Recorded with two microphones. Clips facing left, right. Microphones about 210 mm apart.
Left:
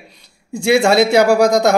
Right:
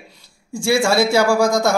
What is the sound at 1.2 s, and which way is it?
Speech, 65° left (ahead or behind).